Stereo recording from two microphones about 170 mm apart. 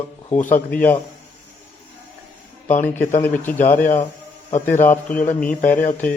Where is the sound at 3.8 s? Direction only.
50° left (ahead or behind).